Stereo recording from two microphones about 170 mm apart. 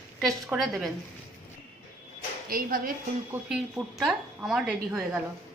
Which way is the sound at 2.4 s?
60° right (ahead or behind).